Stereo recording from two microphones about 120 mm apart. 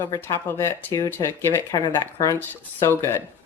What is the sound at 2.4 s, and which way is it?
Speech, 20° left (ahead or behind).